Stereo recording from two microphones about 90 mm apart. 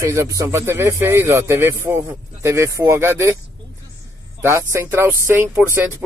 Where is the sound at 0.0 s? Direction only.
35° right (ahead or behind).